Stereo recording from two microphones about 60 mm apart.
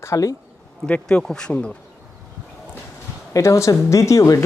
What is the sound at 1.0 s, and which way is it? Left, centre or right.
Speech, centre.